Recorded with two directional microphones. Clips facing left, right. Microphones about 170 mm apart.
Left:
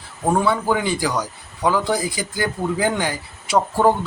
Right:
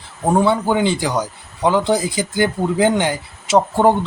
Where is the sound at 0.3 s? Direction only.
25° right (ahead or behind).